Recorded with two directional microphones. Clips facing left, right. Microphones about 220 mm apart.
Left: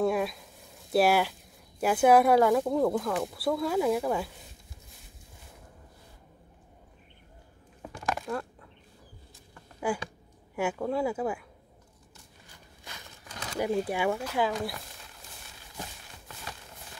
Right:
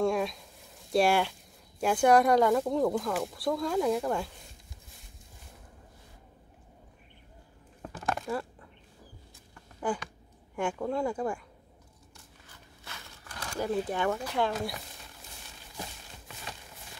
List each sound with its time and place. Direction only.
0.0 s a sound: 5° left (ahead or behind)
0.9 s speech: 5° left (ahead or behind)
7.8 s a sound: centre (ahead or behind)
9.9 s speech: 10° left (ahead or behind)
12.8 s crumpling: 15° left (ahead or behind)
13.8 s speech: 10° left (ahead or behind)